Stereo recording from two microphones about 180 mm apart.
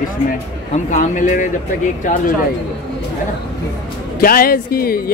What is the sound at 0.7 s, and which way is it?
A man's voice, 40° left (ahead or behind).